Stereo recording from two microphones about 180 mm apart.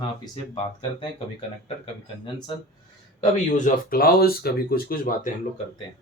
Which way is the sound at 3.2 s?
45° left (ahead or behind).